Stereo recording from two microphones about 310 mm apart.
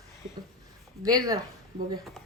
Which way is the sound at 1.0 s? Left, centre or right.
Centre.